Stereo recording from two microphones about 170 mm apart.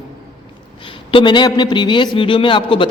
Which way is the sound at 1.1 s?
30° left (ahead or behind).